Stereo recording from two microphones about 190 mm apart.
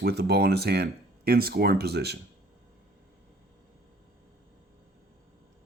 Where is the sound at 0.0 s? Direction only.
55° right (ahead or behind).